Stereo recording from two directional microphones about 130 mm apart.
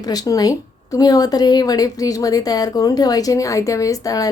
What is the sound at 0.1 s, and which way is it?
A woman's voice, 30° left (ahead or behind).